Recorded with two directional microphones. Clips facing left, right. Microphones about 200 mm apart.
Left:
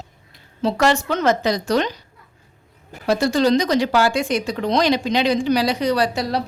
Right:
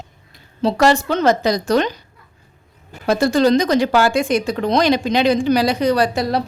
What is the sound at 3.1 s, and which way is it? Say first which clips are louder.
Speech: right 2 dB; 50° right (ahead or behind).